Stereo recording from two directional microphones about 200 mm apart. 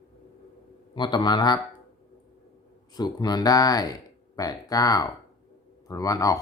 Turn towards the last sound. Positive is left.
turn(degrees=15)  # may be behind; listen again after turning